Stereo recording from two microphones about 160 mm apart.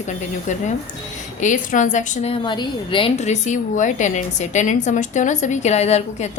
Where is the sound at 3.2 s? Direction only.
50° left (ahead or behind).